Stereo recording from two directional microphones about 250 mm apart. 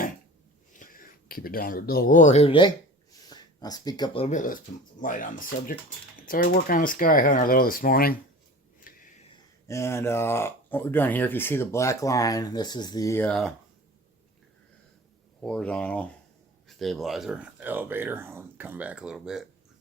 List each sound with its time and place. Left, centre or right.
0.7 s speech: left
8.9 s a sound: left
9.3 s speech: centre
15.4 s speech: centre